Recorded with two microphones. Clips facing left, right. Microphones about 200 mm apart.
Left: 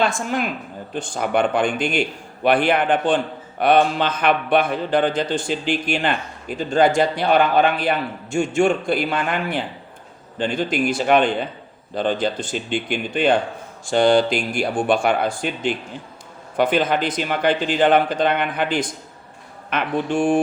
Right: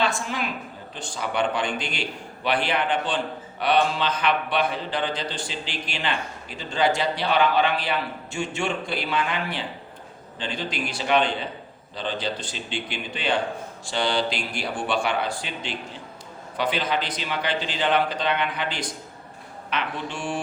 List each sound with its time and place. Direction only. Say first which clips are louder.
0.0 s a man's voice: left 5 dB; 50° left (ahead or behind)